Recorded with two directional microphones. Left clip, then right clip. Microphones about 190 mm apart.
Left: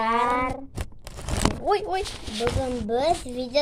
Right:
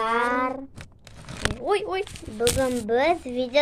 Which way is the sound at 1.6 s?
20° left (ahead or behind).